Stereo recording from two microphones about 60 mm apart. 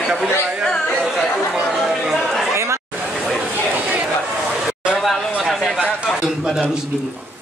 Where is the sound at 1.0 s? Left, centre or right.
Centre.